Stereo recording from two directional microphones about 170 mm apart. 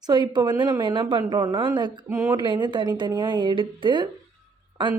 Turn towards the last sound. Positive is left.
turn(degrees=-10)  # may be behind; listen again after turning